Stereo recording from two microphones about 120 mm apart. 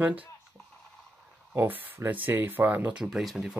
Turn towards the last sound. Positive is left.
turn(degrees=0)  # may be behind; listen again after turning